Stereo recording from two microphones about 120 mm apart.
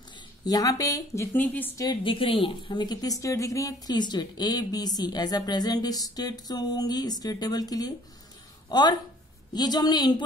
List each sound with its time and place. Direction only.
0.5 s speech: 30° left (ahead or behind); by 1.7 s 15° left (ahead or behind)
2.0 s a woman's voice: 45° left (ahead or behind)